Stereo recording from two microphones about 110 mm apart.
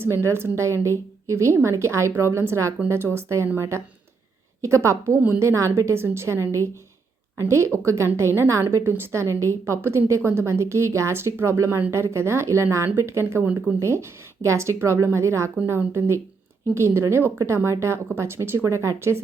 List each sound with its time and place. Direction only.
0.0 s a woman's voice: 25° right (ahead or behind)